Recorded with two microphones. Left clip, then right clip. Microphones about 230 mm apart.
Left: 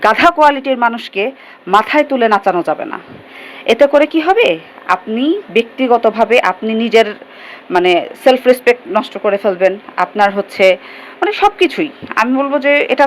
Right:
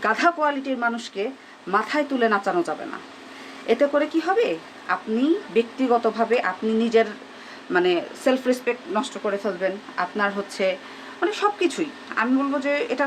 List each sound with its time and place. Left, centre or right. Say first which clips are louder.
0.0 s a woman's voice: left 12 dB; left